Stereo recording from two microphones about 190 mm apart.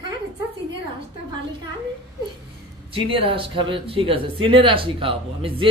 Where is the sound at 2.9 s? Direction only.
30° right (ahead or behind).